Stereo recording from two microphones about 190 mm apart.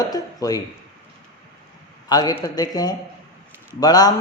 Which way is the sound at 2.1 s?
20° left (ahead or behind).